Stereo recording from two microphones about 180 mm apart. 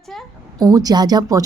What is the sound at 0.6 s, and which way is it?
Speech, 20° right (ahead or behind).